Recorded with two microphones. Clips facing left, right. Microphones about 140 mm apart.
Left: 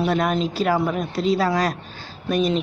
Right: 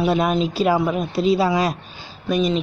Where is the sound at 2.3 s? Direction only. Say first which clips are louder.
Right 1 dB; centre (ahead or behind).